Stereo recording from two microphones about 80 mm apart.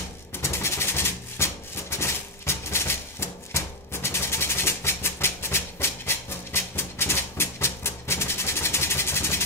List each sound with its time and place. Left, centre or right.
0.4 s maraca: left